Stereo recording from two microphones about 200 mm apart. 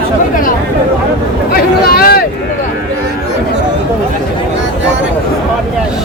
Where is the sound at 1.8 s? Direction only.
50° left (ahead or behind).